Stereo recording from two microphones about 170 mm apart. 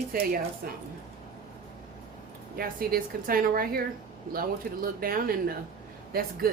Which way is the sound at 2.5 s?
60° right (ahead or behind).